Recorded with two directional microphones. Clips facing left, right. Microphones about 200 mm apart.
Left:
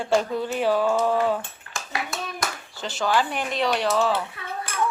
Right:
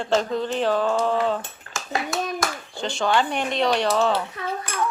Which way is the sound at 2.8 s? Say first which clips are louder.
Right 2 dB; 5° left (ahead or behind).